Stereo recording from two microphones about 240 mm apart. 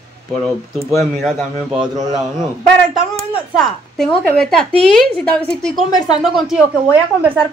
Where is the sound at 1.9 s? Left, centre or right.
Centre.